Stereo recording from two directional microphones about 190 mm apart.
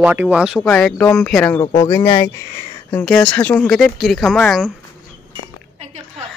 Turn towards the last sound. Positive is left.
turn(degrees=-35)  # may be behind; listen again after turning